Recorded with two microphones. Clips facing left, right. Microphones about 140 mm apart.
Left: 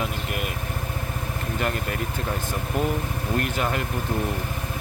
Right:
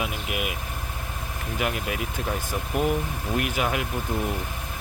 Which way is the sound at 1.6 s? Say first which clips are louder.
Even; 5° right (ahead or behind).